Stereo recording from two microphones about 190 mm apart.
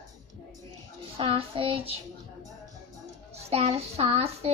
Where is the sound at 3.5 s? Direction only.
30° right (ahead or behind).